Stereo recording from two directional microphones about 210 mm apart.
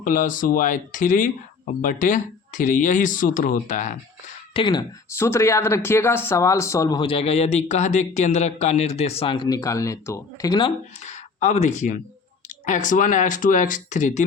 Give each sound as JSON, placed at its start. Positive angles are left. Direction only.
{"t": 0.0, "sound": "speech", "side_deg": 40}
{"t": 4.5, "sound": "speech", "side_deg": 20}
{"t": 11.0, "sound": "speech", "side_deg": 35}